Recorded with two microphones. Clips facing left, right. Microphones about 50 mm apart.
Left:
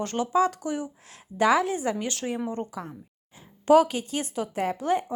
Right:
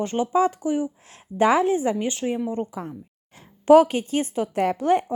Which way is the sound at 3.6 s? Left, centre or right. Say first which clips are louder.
Right 4 dB; right.